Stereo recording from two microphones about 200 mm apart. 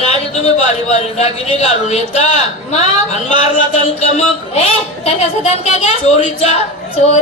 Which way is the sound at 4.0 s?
30° left (ahead or behind).